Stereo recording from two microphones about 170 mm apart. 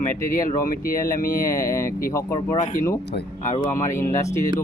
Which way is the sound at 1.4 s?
20° left (ahead or behind).